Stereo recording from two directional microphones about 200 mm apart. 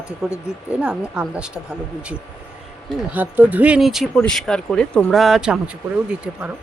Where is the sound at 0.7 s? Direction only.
5° right (ahead or behind).